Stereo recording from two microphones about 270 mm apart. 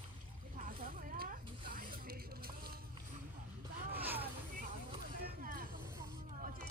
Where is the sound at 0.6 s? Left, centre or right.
Right.